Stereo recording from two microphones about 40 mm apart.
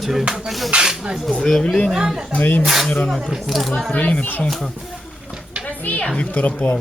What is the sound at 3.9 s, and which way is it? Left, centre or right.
Speech, left.